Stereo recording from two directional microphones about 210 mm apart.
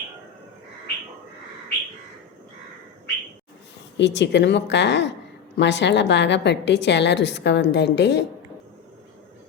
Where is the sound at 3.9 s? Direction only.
55° left (ahead or behind).